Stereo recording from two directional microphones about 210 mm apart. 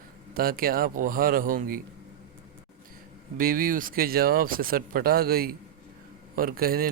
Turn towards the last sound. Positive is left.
turn(degrees=-45)  # may be behind; listen again after turning